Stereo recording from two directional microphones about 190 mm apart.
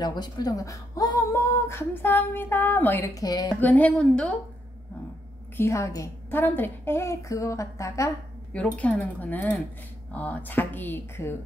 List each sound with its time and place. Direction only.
0.0 s speech: 20° left (ahead or behind)
3.6 s speech: 10° left (ahead or behind)
5.6 s speech: 15° left (ahead or behind)